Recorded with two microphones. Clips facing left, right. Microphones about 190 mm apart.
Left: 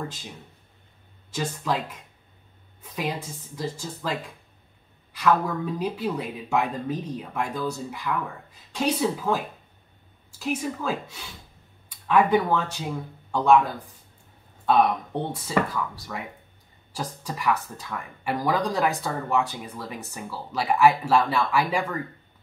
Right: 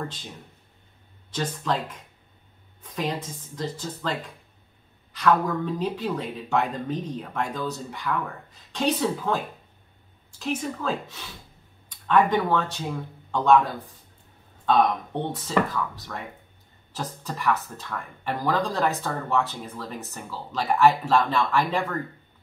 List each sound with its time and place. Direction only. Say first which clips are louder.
1.3 s speech: even; 10° left (ahead or behind)
3.0 s speech: right 1 dB; 10° left (ahead or behind)
10.4 s speech: even; 10° left (ahead or behind)
14.7 s speech: left 1 dB; 10° left (ahead or behind)